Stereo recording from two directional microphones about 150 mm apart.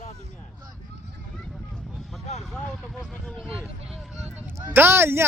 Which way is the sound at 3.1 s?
5° left (ahead or behind).